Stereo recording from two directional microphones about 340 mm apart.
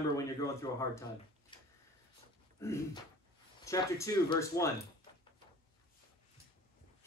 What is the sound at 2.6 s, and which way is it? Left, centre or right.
Speech, centre.